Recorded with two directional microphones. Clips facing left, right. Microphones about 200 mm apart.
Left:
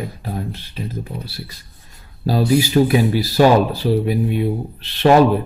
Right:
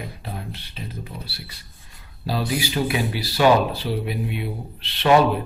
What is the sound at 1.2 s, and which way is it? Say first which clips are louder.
Speech: left 6 dB; 40° left (ahead or behind).